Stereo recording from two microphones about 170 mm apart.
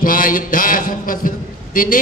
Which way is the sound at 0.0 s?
55° left (ahead or behind).